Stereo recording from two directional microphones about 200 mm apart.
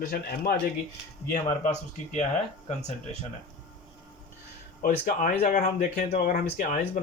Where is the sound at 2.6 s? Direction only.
35° left (ahead or behind).